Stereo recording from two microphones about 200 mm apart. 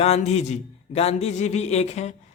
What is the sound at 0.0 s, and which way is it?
A man's voice, 30° left (ahead or behind).